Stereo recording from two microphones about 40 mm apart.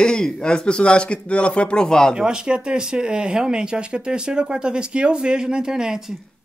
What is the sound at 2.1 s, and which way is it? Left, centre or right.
Speech, centre.